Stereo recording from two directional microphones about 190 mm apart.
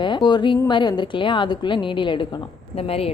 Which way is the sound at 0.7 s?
25° left (ahead or behind).